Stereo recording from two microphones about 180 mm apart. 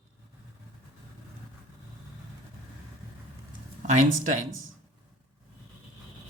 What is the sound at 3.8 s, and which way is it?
Speech, 45° right (ahead or behind).